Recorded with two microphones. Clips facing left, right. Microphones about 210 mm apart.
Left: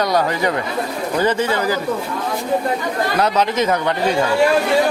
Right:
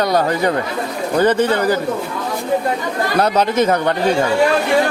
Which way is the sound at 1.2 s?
55° right (ahead or behind).